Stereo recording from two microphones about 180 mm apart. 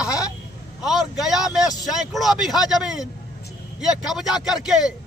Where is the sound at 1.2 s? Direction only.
Centre (ahead or behind).